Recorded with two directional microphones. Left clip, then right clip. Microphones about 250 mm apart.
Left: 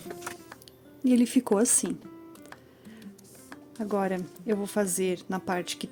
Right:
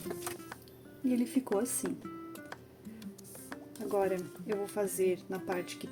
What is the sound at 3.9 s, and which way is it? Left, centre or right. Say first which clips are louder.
Speech: left 2 dB; left.